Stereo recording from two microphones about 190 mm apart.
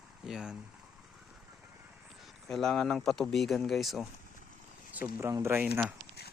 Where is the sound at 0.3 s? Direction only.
5° right (ahead or behind).